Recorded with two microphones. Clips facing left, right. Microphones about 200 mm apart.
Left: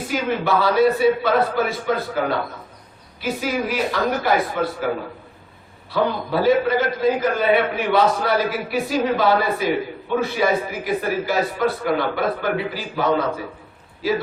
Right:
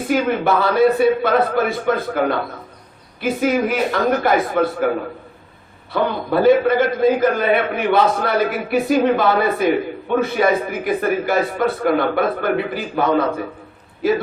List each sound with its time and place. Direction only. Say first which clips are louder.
0.1 s a man's voice: right 4 dB; 55° right (ahead or behind)
3.2 s a man's voice: right 6 dB; 55° right (ahead or behind)
5.9 s a man's voice: right 2 dB; 55° right (ahead or behind)